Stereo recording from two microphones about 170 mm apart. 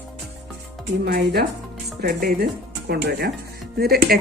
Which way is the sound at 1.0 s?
70° right (ahead or behind).